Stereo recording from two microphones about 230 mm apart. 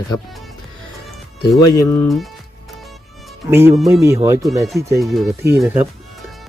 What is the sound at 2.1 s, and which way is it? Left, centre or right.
Speech, centre.